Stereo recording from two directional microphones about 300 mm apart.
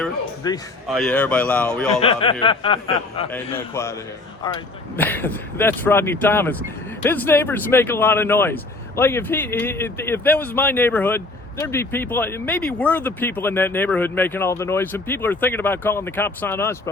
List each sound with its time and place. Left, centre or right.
0.4 s speech: centre
0.9 s speech: centre
2.0 s speech: centre